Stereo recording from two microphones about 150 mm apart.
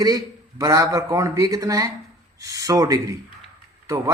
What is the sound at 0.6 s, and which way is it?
Speech, 20° right (ahead or behind).